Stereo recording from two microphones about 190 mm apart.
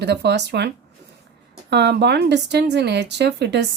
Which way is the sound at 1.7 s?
65° right (ahead or behind).